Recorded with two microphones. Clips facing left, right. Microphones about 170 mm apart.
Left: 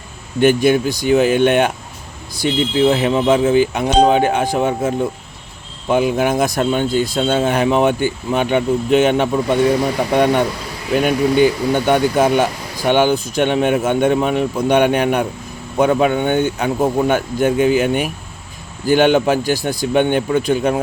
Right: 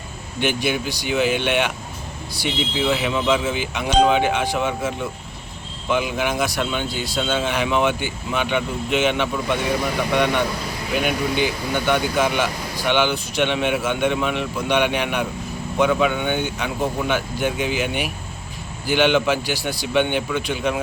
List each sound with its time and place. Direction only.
0.3 s speech: 45° left (ahead or behind)
2.8 s speech: 40° left (ahead or behind)